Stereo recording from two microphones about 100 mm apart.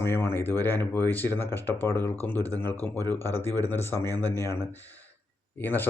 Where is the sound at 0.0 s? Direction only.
25° left (ahead or behind).